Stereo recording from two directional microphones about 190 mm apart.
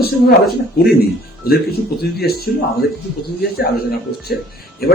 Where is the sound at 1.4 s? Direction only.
55° left (ahead or behind).